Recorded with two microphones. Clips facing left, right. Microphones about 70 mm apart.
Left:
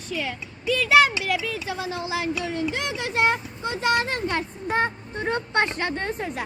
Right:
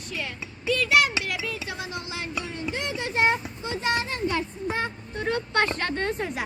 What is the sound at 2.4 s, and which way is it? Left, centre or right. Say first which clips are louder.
Speech: left 7 dB; left.